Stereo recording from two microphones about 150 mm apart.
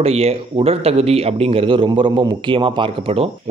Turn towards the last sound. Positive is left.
turn(degrees=-35)  # may be behind; listen again after turning